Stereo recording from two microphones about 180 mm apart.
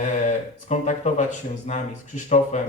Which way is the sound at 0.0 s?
45° left (ahead or behind).